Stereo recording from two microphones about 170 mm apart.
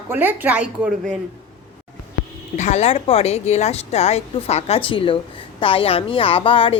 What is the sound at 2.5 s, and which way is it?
Speech, 40° left (ahead or behind).